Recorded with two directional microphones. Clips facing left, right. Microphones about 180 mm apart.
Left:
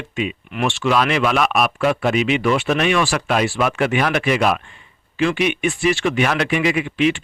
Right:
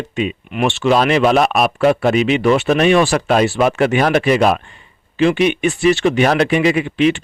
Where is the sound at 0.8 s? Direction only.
35° right (ahead or behind).